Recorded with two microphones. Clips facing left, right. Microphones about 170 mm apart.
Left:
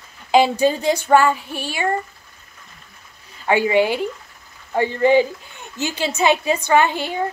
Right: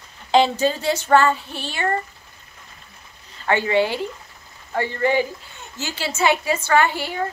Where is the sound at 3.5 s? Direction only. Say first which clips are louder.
Left 3 dB; 15° left (ahead or behind).